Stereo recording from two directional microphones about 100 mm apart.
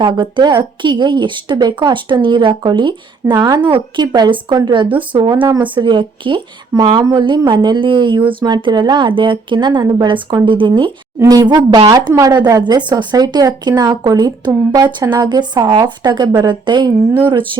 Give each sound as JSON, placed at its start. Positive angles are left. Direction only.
{"t": 0.0, "sound": "a woman's voice", "side_deg": -55}
{"t": 3.7, "sound": "a woman's voice", "side_deg": -50}
{"t": 6.7, "sound": "a woman's voice", "side_deg": -45}
{"t": 11.2, "sound": "a woman's voice", "side_deg": -40}